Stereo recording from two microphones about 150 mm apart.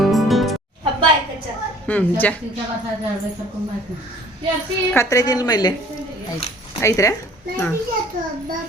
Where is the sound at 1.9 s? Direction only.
10° left (ahead or behind).